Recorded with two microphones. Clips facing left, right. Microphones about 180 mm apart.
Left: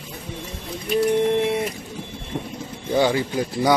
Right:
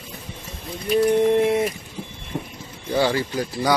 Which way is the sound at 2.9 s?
20° left (ahead or behind).